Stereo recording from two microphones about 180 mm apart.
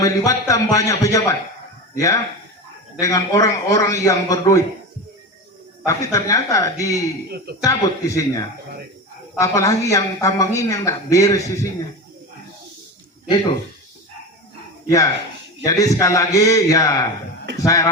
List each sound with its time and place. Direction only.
0.0 s a woman's voice: 20° left (ahead or behind)
3.0 s a woman's voice: 20° left (ahead or behind)
5.8 s a woman's voice: 20° left (ahead or behind)
7.3 s speech: 60° right (ahead or behind)
7.6 s a man's voice: 20° left (ahead or behind)
14.8 s a man's voice: 20° left (ahead or behind)